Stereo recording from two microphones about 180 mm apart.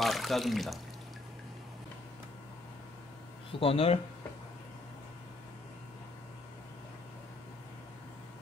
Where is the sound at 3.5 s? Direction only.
30° left (ahead or behind).